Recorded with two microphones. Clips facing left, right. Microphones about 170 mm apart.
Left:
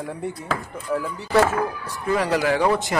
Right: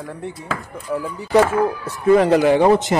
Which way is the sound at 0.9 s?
15° right (ahead or behind).